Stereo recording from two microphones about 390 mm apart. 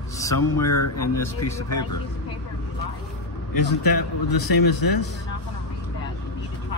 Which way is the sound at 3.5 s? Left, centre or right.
Left.